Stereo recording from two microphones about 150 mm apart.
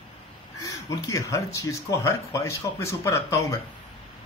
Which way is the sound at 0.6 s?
20° left (ahead or behind).